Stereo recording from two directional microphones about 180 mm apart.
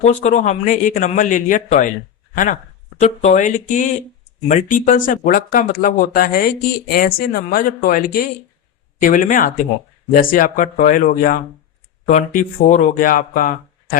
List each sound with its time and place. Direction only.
0.0 s speech: 40° left (ahead or behind)